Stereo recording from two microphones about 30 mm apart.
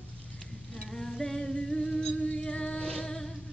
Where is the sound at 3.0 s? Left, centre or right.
Centre.